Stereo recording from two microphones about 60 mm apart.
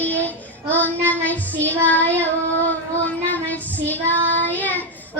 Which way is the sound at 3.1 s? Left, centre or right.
Left.